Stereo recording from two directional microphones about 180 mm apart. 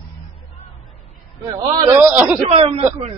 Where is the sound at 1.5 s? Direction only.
20° right (ahead or behind).